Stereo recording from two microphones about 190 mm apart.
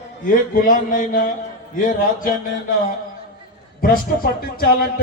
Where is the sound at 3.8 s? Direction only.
50° left (ahead or behind).